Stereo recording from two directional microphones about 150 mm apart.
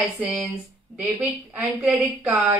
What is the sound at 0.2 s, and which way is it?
A woman's voice, centre (ahead or behind).